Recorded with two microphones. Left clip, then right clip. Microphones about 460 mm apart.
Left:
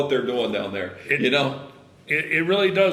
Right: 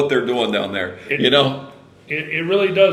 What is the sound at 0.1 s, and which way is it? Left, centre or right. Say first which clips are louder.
Speech: right 4 dB; right.